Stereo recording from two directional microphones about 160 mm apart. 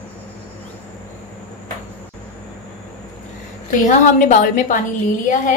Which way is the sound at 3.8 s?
50° left (ahead or behind).